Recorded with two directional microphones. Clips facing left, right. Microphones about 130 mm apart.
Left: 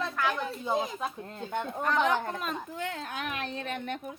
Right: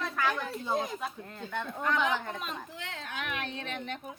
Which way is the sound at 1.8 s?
40° left (ahead or behind).